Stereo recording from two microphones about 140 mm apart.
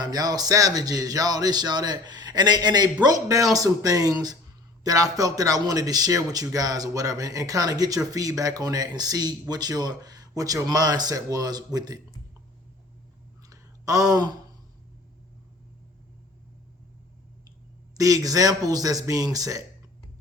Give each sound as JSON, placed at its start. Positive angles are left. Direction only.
{"t": 0.0, "sound": "speech", "side_deg": -30}
{"t": 13.5, "sound": "a sound", "side_deg": -25}
{"t": 17.9, "sound": "speech", "side_deg": -25}